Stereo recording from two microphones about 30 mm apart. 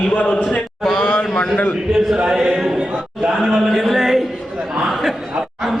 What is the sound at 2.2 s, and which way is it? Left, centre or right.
Speech, right.